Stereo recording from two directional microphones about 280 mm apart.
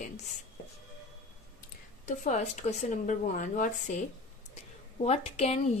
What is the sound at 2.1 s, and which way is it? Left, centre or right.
Speech, left.